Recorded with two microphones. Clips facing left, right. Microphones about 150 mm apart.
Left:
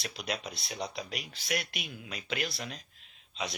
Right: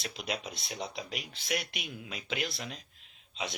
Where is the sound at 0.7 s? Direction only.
Centre (ahead or behind).